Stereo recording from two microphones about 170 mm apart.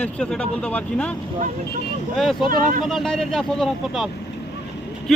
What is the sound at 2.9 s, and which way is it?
Speech, centre (ahead or behind).